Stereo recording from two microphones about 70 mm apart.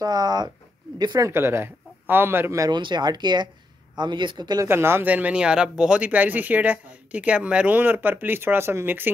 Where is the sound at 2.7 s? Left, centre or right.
Right.